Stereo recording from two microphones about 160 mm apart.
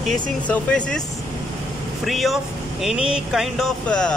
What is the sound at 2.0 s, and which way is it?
Speech, centre (ahead or behind).